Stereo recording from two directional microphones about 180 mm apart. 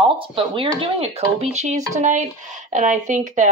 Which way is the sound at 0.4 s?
30° right (ahead or behind).